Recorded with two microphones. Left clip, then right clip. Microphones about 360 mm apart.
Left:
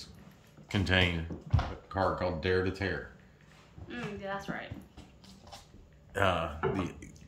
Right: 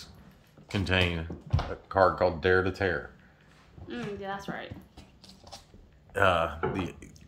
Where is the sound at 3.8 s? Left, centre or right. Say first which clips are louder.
Right 3 dB; right.